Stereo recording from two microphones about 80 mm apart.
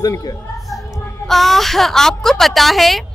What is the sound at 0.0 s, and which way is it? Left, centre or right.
Speech, left.